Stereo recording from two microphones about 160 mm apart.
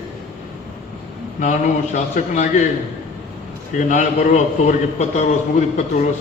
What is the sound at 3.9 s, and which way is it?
A man's voice, 50° left (ahead or behind).